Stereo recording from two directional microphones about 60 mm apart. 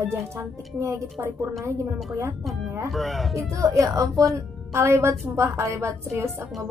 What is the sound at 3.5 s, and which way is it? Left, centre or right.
Speech, right.